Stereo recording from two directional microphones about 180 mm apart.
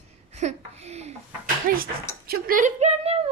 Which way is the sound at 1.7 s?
50° right (ahead or behind).